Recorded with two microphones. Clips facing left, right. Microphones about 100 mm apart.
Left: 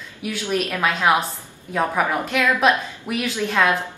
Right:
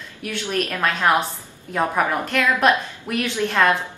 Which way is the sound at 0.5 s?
15° left (ahead or behind).